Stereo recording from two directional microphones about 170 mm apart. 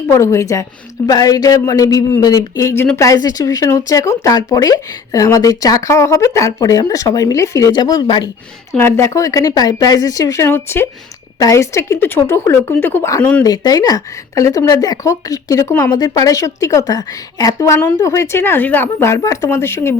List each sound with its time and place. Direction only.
0.1 s a woman's voice: 15° left (ahead or behind)
8.7 s a woman's voice: 15° left (ahead or behind)